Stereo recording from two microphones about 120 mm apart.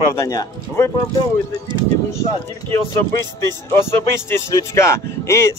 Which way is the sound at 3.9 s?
20° left (ahead or behind).